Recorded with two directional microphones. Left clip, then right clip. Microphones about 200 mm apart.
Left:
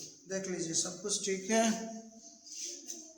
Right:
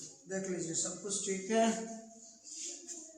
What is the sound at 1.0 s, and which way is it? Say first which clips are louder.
Speech: left 3 dB; 60° left (ahead or behind).